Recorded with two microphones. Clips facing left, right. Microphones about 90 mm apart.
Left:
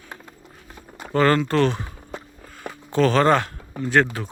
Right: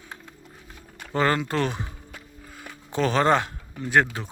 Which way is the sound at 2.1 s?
30° left (ahead or behind).